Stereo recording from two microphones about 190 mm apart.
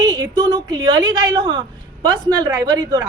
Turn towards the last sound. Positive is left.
turn(degrees=-20)  # may be behind; listen again after turning